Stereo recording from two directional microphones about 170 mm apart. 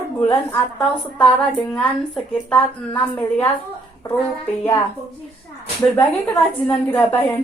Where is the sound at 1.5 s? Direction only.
5° left (ahead or behind).